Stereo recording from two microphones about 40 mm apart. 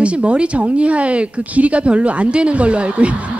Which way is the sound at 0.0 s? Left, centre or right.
Right.